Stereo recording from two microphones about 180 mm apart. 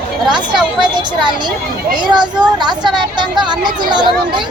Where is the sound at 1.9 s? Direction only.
25° right (ahead or behind).